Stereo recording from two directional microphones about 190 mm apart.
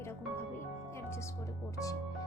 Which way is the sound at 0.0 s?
15° left (ahead or behind).